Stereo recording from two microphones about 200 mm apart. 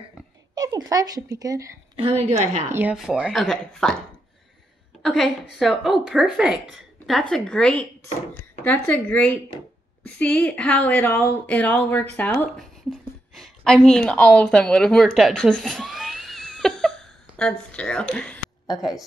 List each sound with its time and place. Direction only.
0.6 s speech: 20° right (ahead or behind)
2.0 s a woman's voice: 30° right (ahead or behind)
2.7 s a woman's voice: 5° right (ahead or behind)
5.0 s a sound: centre (ahead or behind)
5.6 s a woman's voice: centre (ahead or behind)